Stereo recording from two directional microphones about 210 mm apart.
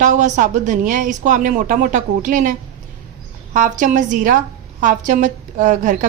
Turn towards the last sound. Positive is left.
turn(degrees=-35)  # may be behind; listen again after turning